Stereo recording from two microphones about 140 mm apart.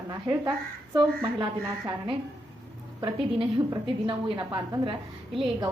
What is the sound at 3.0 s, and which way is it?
A woman's voice, 30° right (ahead or behind).